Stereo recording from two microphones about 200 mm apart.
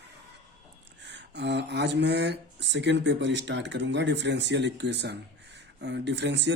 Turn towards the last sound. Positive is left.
turn(degrees=-60)  # may be behind; listen again after turning